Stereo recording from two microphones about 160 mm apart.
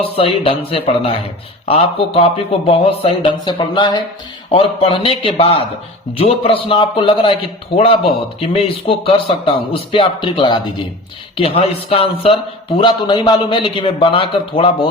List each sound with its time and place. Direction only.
0.0 s speech: 35° left (ahead or behind)
8.4 s speech: 35° left (ahead or behind)